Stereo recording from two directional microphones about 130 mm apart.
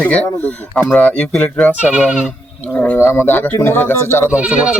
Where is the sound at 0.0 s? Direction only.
10° left (ahead or behind).